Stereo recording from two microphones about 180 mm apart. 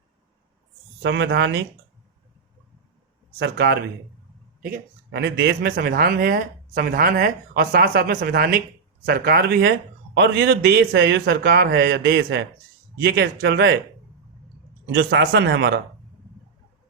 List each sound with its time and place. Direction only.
1.0 s a man's voice: 75° right (ahead or behind)
3.3 s a man's voice: 70° right (ahead or behind)
13.0 s speech: 65° right (ahead or behind)
14.8 s speech: 70° right (ahead or behind)